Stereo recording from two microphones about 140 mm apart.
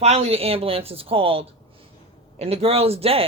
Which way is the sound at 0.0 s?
50° right (ahead or behind).